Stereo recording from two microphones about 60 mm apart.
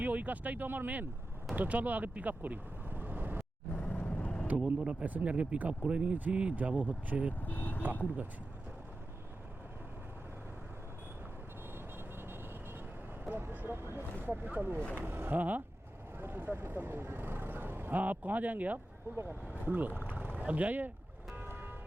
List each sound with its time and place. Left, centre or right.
0.0 s speech: right
3.8 s vehicle: left
4.5 s speech: centre
7.3 s speech: left
11.7 s vehicle: right
13.4 s a sound: right
14.9 s speech: right
21.4 s vehicle: right